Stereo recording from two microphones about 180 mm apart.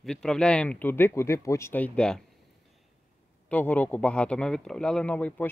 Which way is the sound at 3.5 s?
10° left (ahead or behind).